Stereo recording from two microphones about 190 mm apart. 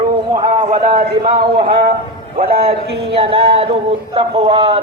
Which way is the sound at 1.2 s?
25° right (ahead or behind).